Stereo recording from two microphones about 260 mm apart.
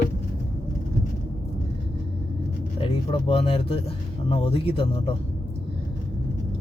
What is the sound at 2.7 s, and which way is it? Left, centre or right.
Speech, left.